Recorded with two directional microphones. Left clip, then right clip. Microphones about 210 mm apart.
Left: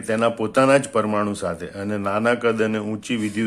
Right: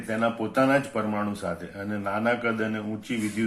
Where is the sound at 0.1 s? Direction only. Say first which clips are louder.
Left 6 dB; 50° left (ahead or behind).